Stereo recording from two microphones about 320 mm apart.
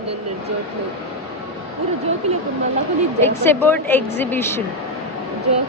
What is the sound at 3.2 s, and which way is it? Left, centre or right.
Speech, centre.